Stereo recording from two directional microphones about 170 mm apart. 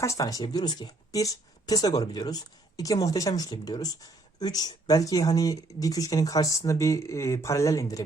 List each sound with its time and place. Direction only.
0.0 s speech: 20° left (ahead or behind)